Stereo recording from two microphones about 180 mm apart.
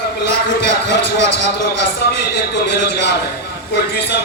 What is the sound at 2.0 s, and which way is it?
Music, 65° left (ahead or behind).